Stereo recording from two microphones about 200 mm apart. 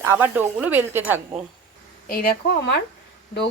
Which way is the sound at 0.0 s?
10° right (ahead or behind).